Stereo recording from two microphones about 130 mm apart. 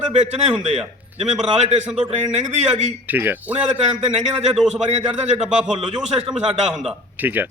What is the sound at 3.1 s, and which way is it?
Speech, 15° right (ahead or behind).